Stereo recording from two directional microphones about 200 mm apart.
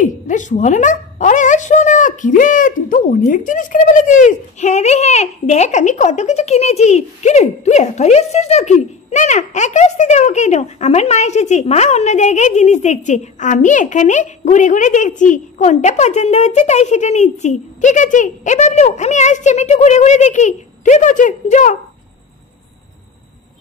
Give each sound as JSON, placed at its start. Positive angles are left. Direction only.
{"t": 0.0, "sound": "speech", "side_deg": 40}